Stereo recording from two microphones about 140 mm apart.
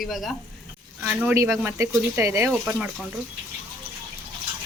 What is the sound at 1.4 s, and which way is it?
Speech, 20° right (ahead or behind).